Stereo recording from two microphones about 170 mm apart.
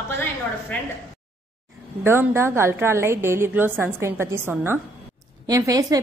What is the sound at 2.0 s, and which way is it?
A woman's voice, 15° right (ahead or behind).